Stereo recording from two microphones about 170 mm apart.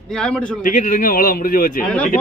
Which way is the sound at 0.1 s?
5° left (ahead or behind).